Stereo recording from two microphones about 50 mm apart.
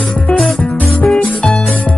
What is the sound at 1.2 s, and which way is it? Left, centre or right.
Music, left.